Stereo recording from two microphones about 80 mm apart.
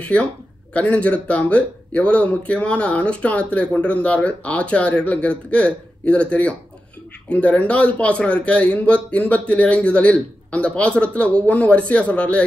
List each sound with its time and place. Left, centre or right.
0.0 s a man's voice: centre